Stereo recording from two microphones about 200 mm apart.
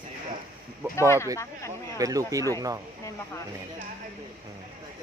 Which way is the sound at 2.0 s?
15° right (ahead or behind).